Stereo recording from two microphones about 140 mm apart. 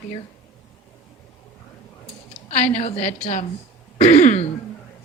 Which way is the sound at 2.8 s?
50° left (ahead or behind).